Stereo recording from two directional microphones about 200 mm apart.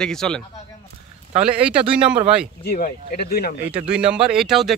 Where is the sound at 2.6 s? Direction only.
45° left (ahead or behind).